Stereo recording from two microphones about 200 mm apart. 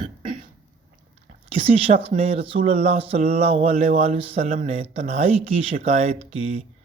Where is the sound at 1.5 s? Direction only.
30° right (ahead or behind).